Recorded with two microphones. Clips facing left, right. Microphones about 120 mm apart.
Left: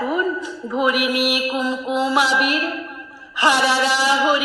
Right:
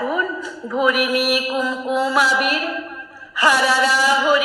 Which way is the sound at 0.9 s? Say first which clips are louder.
Right 1 dB; 40° right (ahead or behind).